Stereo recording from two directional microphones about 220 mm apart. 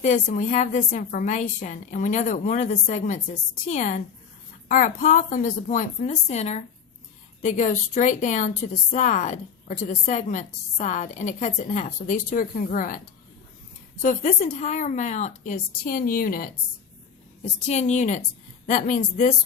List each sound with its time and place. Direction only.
0.0 s speech: 35° left (ahead or behind)
14.0 s speech: 35° left (ahead or behind)